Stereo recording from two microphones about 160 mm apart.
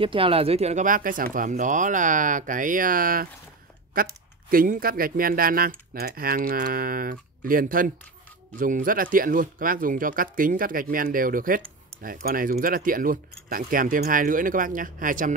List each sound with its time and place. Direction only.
0.0 s speech: 35° right (ahead or behind); by 15.3 s 55° right (ahead or behind)